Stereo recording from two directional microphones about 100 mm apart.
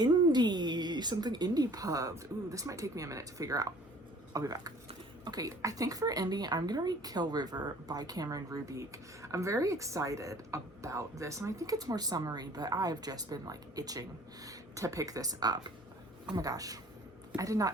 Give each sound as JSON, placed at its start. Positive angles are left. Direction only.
{"t": 0.0, "sound": "a woman's voice", "side_deg": -45}